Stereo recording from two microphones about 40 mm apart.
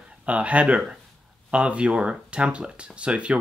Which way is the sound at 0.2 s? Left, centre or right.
Right.